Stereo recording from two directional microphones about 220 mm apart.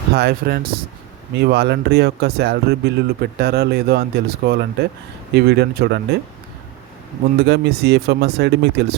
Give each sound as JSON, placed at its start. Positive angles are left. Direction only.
{"t": 0.2, "sound": "speech", "side_deg": -45}
{"t": 7.4, "sound": "speech", "side_deg": -50}